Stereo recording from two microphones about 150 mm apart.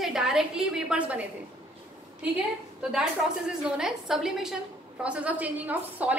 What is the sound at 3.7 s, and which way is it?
A woman's voice, 5° right (ahead or behind).